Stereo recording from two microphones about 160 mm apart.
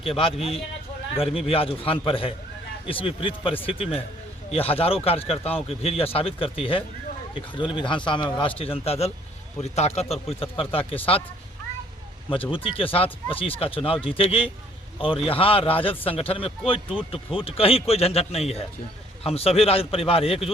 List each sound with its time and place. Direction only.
0.0 s speech: 35° left (ahead or behind)
12.3 s speech: 35° left (ahead or behind)